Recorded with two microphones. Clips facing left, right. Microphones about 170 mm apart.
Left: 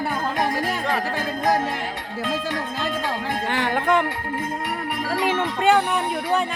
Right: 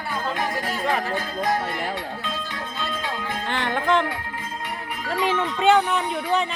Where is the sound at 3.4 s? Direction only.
10° left (ahead or behind).